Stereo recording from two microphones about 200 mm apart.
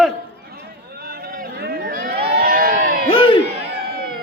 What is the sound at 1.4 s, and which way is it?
Crowd, 50° right (ahead or behind).